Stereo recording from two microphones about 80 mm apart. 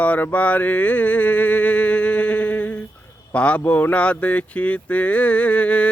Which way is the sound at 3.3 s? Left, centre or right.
Centre.